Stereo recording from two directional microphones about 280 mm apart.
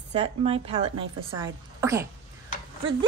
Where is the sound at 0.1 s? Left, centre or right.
Right.